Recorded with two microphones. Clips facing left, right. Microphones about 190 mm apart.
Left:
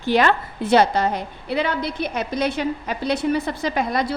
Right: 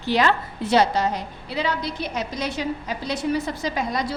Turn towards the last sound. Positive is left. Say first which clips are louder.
# left 3 dB
turn(degrees=60)  # may be behind; listen again after turning